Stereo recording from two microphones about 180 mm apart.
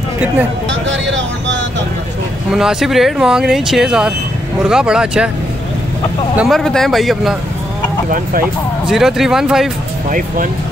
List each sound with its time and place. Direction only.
0.7 s vehicle: 90° right
2.5 s speech: centre (ahead or behind)
6.3 s speech: centre (ahead or behind)
8.1 s speech: 50° right (ahead or behind)
8.8 s speech: centre (ahead or behind)
10.1 s speech: 50° right (ahead or behind)